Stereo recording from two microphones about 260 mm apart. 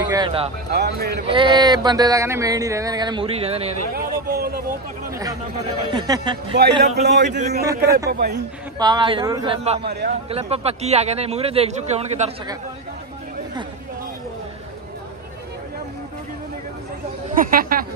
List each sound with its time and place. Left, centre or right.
0.0 s speech: centre
0.7 s speech: right
1.2 s speech: centre
3.9 s speech: right
5.9 s speech: centre
6.5 s speech: right
7.2 s speech: right
7.6 s speech: centre
8.1 s speech: right
8.7 s speech: centre
9.8 s speech: right
10.3 s speech: right
17.4 s speech: right